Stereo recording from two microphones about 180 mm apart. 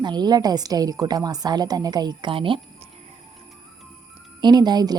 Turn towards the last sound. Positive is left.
turn(degrees=-25)  # may be behind; listen again after turning